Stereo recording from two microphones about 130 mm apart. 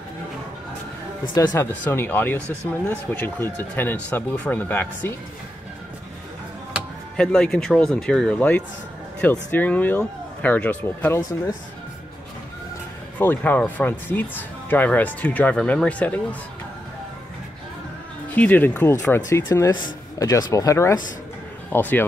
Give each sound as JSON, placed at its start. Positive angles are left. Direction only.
{"t": 1.3, "sound": "speech", "side_deg": 20}
{"t": 7.2, "sound": "speech", "side_deg": 5}
{"t": 13.2, "sound": "speech", "side_deg": 15}
{"t": 18.3, "sound": "speech", "side_deg": 15}